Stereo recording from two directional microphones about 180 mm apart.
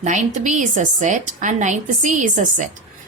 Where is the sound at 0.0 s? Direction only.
45° right (ahead or behind).